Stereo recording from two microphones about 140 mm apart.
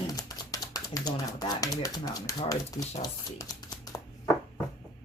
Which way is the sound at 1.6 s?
25° left (ahead or behind).